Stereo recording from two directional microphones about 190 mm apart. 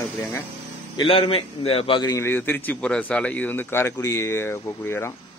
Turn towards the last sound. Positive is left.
turn(degrees=15)  # may be behind; listen again after turning